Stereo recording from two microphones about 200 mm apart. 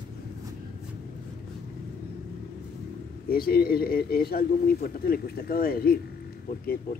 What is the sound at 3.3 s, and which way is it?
Speech, 50° left (ahead or behind).